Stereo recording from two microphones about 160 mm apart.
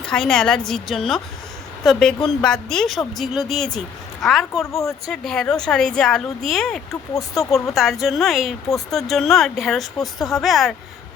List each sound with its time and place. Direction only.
0.0 s a woman's voice: 5° left (ahead or behind)
7.1 s speech: 20° left (ahead or behind)
7.5 s speech: centre (ahead or behind)